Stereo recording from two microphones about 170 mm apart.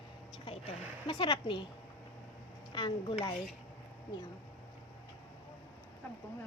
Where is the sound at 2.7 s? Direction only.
30° left (ahead or behind).